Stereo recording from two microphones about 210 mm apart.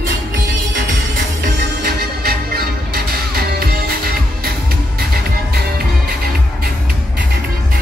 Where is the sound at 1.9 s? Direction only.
45° right (ahead or behind).